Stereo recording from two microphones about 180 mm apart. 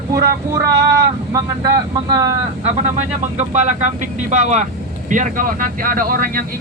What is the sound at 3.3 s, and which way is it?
Speech, 40° right (ahead or behind).